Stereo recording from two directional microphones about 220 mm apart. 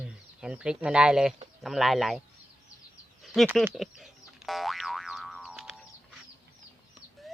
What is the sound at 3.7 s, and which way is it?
Boing, centre (ahead or behind).